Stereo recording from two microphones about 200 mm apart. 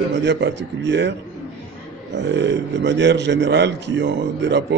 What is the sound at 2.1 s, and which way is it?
Speech, 60° right (ahead or behind).